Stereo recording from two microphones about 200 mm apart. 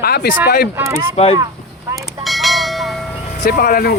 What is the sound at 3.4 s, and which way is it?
Speech, 50° left (ahead or behind).